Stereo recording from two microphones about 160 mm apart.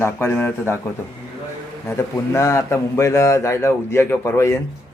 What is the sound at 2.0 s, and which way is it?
Speech, 20° left (ahead or behind).